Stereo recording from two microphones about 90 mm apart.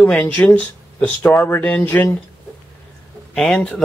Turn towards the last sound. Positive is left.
turn(degrees=5)  # may be behind; listen again after turning